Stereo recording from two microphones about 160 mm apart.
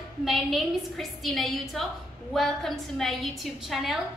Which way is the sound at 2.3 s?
Centre (ahead or behind).